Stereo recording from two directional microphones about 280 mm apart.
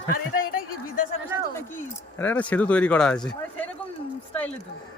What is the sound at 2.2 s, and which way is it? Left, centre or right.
Speech, centre.